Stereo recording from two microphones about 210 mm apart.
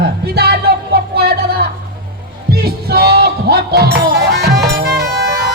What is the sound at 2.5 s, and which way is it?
Music, 50° right (ahead or behind).